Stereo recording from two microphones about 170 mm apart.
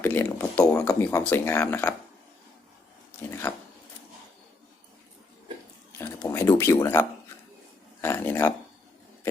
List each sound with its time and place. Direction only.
0.0 s speech: 10° left (ahead or behind)
3.2 s speech: 10° left (ahead or behind)
6.0 s speech: 15° left (ahead or behind)
8.0 s speech: 15° left (ahead or behind)